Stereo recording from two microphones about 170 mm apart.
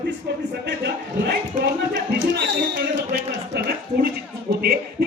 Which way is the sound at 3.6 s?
65° right (ahead or behind).